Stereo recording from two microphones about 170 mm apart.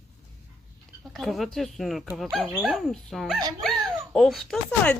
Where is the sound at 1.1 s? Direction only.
Centre (ahead or behind).